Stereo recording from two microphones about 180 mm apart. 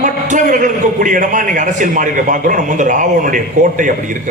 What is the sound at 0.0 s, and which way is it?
A man's voice, 45° right (ahead or behind).